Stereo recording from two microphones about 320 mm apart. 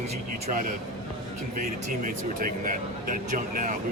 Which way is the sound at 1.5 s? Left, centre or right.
Right.